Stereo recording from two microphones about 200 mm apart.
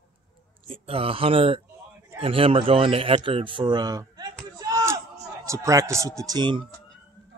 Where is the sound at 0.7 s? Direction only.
30° right (ahead or behind).